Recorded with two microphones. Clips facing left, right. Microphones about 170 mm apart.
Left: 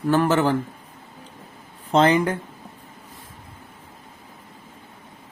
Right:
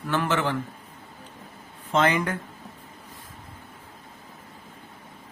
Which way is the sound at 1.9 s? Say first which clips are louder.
Left 5 dB; 30° left (ahead or behind).